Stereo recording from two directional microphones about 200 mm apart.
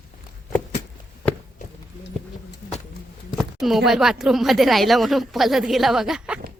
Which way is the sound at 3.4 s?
Centre (ahead or behind).